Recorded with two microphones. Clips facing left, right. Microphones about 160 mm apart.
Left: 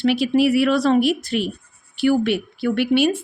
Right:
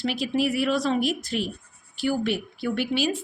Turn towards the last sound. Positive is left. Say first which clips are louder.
# left 8 dB
turn(degrees=65)  # may be behind; listen again after turning